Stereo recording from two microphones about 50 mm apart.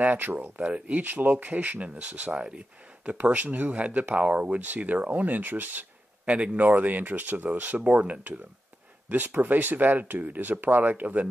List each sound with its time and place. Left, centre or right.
0.0 s speech: right
1.0 s speech: right
1.3 s speech: right
3.1 s speech: right
6.3 s speech: right